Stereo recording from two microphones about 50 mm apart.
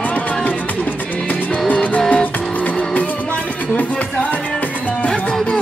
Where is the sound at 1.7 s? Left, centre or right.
Left.